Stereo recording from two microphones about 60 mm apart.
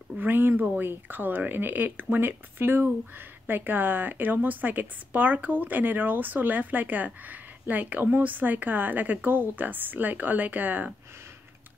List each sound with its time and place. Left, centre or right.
0.2 s a woman's voice: right